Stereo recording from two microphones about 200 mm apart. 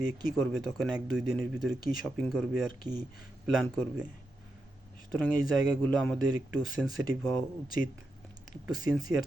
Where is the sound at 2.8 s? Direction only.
20° right (ahead or behind).